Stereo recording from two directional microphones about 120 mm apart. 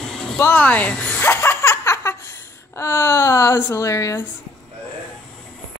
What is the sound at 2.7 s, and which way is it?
Speech, 20° left (ahead or behind).